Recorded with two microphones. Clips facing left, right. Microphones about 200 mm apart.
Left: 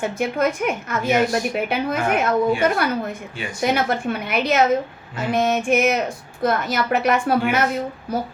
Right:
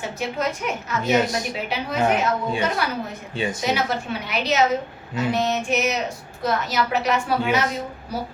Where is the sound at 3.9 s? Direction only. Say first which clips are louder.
Left 4 dB; 55° left (ahead or behind).